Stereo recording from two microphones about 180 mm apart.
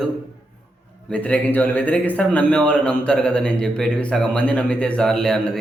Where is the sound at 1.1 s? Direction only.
10° left (ahead or behind).